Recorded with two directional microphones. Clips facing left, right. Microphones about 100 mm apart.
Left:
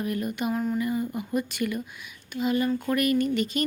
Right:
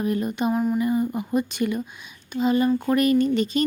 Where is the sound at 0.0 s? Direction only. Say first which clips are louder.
Right 5 dB; 25° right (ahead or behind).